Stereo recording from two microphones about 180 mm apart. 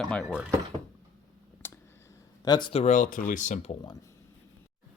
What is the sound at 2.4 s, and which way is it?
Speech, 25° left (ahead or behind).